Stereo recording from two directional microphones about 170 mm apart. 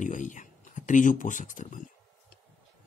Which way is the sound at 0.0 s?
45° left (ahead or behind).